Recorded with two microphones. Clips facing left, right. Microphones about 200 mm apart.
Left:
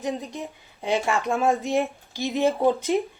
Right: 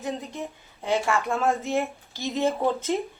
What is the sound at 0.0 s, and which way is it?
Speech, 15° left (ahead or behind).